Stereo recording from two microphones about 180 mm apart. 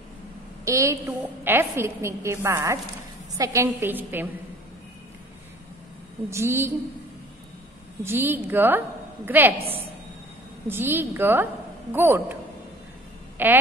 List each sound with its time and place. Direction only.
0.7 s a woman's voice: 15° right (ahead or behind)
6.3 s a woman's voice: 15° right (ahead or behind)
8.0 s a woman's voice: 10° right (ahead or behind)
10.7 s a woman's voice: 10° right (ahead or behind)
13.4 s a woman's voice: 10° right (ahead or behind)